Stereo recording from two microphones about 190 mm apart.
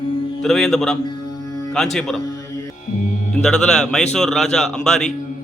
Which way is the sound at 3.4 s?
5° left (ahead or behind).